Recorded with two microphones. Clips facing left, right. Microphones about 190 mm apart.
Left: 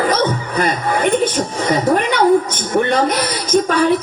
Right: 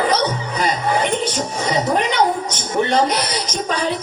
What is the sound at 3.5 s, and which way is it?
Speech, 55° left (ahead or behind).